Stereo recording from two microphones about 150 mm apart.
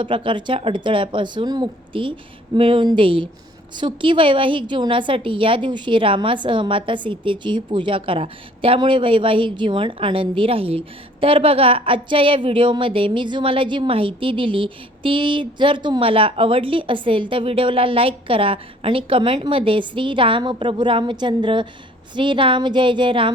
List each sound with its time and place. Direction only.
0.0 s a woman's voice: 35° right (ahead or behind)